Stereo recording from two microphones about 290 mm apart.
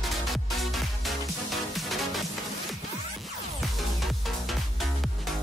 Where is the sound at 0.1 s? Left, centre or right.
Centre.